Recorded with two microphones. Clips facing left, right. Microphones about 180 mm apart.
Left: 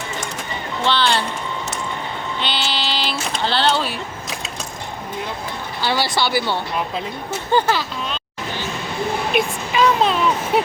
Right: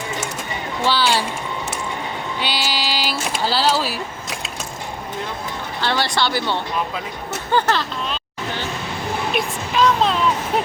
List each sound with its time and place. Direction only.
0.9 s speech: 10° right (ahead or behind)
2.4 s vehicle: 10° right (ahead or behind)
5.8 s speech: 5° left (ahead or behind)
9.3 s a sound: 5° left (ahead or behind)